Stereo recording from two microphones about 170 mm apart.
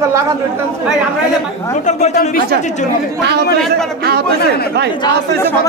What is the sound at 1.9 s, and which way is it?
Speech, 45° left (ahead or behind).